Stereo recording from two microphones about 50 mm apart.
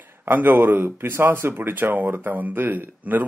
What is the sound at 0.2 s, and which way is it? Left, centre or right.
Speech, right.